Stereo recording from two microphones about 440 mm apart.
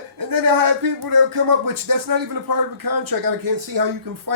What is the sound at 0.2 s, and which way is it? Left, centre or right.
Speech, right.